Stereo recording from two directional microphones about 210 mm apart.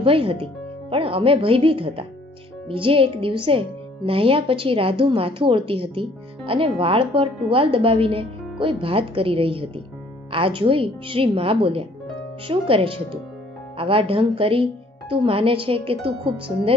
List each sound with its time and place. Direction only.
0.0 s speech: 25° right (ahead or behind)